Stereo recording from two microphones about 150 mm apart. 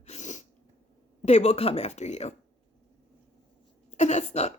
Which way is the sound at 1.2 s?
45° left (ahead or behind).